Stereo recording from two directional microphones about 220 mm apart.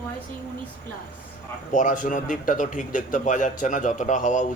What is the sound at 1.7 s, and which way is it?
A man's voice, 35° left (ahead or behind).